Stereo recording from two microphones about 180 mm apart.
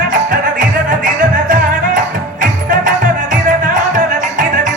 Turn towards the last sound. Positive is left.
turn(degrees=-45)  # may be behind; listen again after turning